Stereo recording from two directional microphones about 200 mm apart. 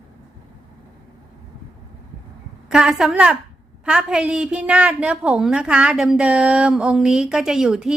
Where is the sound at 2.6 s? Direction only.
5° right (ahead or behind).